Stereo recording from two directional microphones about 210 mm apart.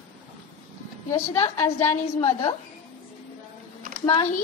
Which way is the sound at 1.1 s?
15° left (ahead or behind).